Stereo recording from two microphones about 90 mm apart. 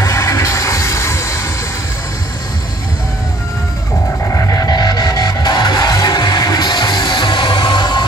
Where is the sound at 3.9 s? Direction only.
40° left (ahead or behind).